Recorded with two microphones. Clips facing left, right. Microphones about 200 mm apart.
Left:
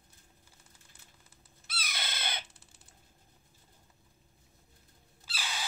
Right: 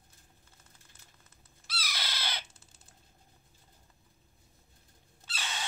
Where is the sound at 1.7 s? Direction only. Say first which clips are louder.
Right 1 dB; 25° left (ahead or behind).